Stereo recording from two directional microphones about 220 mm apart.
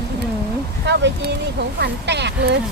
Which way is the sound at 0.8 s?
50° right (ahead or behind).